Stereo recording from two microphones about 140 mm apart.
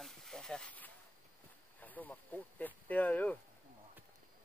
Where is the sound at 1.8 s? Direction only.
10° left (ahead or behind).